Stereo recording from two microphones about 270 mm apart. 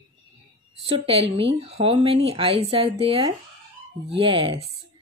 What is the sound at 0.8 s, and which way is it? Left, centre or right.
Speech, right.